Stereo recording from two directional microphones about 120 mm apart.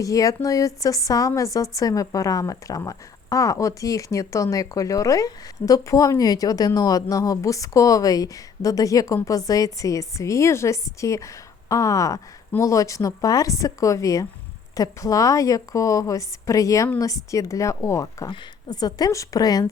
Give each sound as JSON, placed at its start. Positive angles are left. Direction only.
{"t": 0.0, "sound": "a woman's voice", "side_deg": 30}